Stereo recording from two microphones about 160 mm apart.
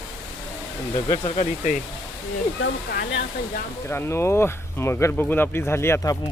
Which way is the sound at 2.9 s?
85° left.